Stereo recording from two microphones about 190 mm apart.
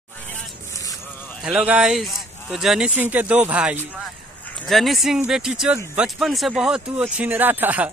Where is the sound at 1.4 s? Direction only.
5° right (ahead or behind).